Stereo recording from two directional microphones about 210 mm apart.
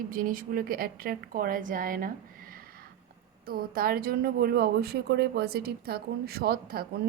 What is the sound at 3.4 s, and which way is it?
A woman's voice, 45° right (ahead or behind).